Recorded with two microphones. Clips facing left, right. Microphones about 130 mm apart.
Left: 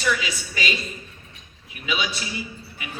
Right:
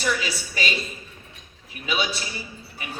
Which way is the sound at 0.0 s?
35° right (ahead or behind).